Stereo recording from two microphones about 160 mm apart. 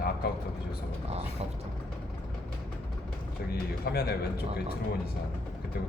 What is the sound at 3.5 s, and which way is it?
Speech, 75° left (ahead or behind).